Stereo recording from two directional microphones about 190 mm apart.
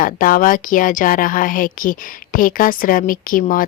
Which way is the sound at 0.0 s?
45° left (ahead or behind).